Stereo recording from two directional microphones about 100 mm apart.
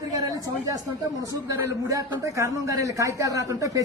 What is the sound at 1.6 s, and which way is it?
A man's voice, 30° right (ahead or behind).